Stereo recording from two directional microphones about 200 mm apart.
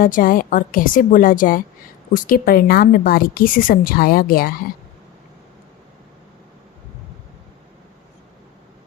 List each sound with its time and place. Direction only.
0.0 s speech: 45° left (ahead or behind)